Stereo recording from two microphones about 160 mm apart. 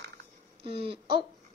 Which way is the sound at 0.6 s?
35° right (ahead or behind).